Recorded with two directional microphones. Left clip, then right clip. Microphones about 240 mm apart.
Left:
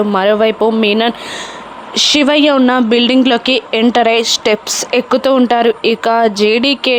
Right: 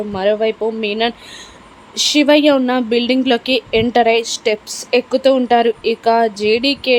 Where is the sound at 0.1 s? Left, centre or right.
Centre.